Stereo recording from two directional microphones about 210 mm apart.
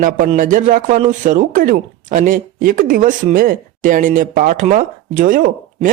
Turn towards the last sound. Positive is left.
turn(degrees=-40)  # may be behind; listen again after turning